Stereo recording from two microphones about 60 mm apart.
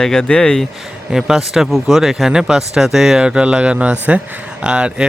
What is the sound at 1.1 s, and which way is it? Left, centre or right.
Speech, centre.